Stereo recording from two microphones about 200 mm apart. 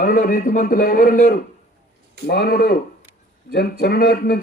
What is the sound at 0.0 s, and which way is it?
A man's voice, 40° left (ahead or behind).